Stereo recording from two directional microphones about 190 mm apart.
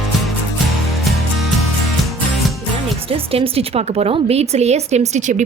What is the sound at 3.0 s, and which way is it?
A woman's voice, 30° right (ahead or behind).